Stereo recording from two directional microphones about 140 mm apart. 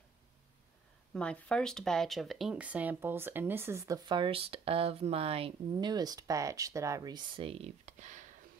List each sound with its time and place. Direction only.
1.1 s speech: 5° left (ahead or behind); by 5.5 s 45° right (ahead or behind)
5.8 s speech: 30° right (ahead or behind); by 8.3 s 60° right (ahead or behind)